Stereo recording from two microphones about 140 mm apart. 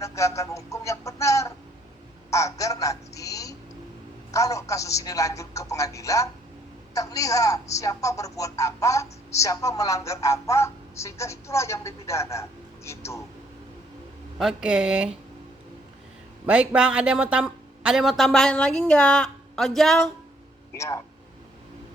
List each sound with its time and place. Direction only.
0.0 s a sound: 20° left (ahead or behind)
4.3 s a woman's voice: 20° left (ahead or behind)
14.3 s speech: 5° right (ahead or behind)
16.5 s speech: 10° right (ahead or behind)